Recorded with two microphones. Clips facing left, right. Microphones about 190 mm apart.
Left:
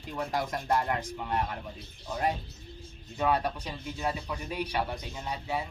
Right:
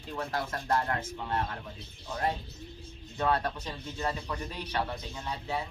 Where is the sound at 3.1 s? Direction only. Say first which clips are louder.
Left 1 dB; 10° left (ahead or behind).